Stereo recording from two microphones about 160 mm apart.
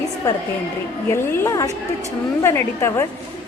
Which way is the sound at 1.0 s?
15° left (ahead or behind).